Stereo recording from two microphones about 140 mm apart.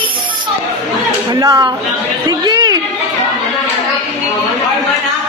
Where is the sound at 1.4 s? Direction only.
25° right (ahead or behind).